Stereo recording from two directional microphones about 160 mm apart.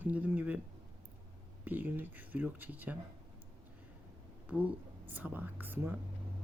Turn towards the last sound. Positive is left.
turn(degrees=-10)  # may be behind; listen again after turning